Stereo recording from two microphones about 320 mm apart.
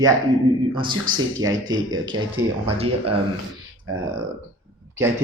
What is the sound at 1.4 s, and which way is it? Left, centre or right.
Speech, centre.